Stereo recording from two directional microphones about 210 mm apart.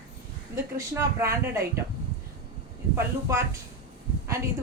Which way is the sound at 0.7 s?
15° right (ahead or behind).